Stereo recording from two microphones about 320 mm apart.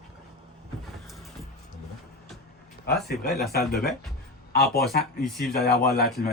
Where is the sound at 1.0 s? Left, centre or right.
Centre.